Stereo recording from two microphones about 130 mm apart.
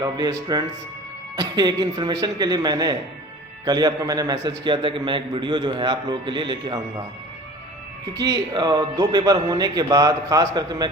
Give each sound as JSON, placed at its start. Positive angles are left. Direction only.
{"t": 0.0, "sound": "a man's voice", "side_deg": -30}
{"t": 8.2, "sound": "a man's voice", "side_deg": -30}